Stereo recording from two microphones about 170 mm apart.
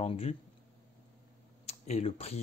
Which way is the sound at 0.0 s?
35° left (ahead or behind).